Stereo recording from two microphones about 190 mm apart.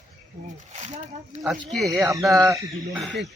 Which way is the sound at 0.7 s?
40° right (ahead or behind).